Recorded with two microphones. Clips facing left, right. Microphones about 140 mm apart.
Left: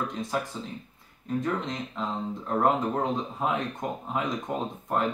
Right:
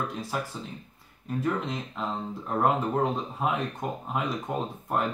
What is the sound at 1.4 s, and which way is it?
Speech, 5° right (ahead or behind).